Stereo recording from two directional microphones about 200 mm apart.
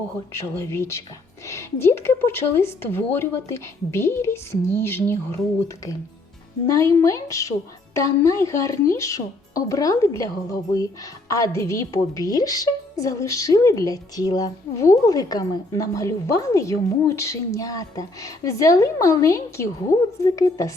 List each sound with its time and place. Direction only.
0.3 s a woman's voice: 15° left (ahead or behind)